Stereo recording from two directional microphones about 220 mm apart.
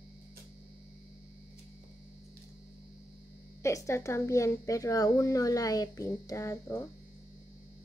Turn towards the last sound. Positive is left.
turn(degrees=15)  # may be behind; listen again after turning